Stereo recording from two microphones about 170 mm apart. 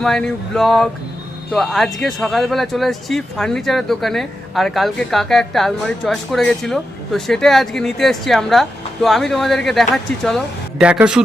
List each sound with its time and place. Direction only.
0.0 s speech: 5° left (ahead or behind)